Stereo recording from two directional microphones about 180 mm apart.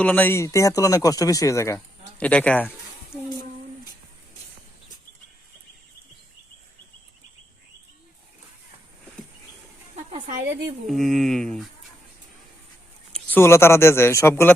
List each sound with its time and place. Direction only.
0.0 s speech: 10° left (ahead or behind)
9.9 s a sound: 40° right (ahead or behind)
10.8 s speech: centre (ahead or behind)
13.1 s speech: 10° left (ahead or behind)